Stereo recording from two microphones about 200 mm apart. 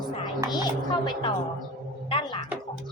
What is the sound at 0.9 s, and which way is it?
A woman's voice, 20° left (ahead or behind).